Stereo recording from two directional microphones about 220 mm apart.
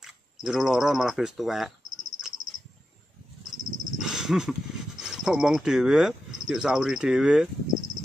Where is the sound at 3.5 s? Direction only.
55° left (ahead or behind).